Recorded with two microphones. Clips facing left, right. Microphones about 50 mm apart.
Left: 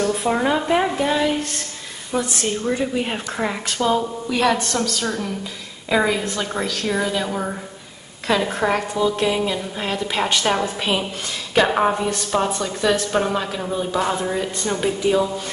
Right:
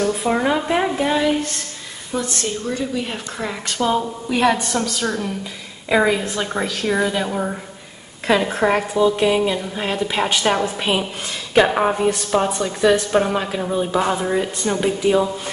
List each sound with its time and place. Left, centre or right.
0.0 s speech: centre
2.1 s speech: centre
3.6 s speech: centre
3.9 s a woman's voice: centre